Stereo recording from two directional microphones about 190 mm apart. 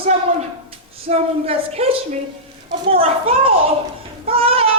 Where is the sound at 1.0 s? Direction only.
30° right (ahead or behind).